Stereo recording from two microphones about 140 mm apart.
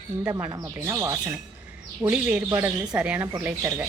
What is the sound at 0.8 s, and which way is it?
Speech, 20° right (ahead or behind).